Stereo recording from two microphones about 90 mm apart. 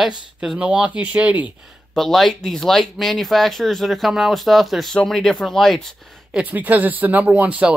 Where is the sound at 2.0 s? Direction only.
5° left (ahead or behind).